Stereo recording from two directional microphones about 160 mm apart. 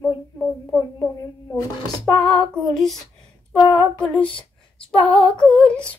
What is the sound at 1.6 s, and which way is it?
Speech, 20° left (ahead or behind).